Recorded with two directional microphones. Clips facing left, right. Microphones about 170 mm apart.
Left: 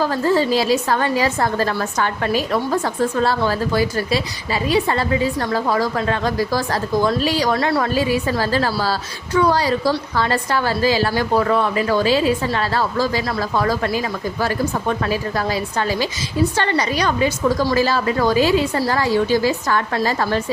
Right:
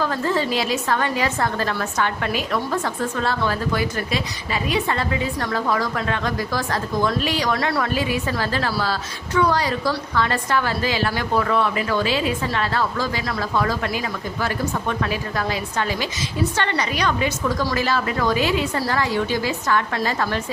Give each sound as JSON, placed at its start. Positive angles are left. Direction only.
{"t": 0.0, "sound": "a woman's voice", "side_deg": 35}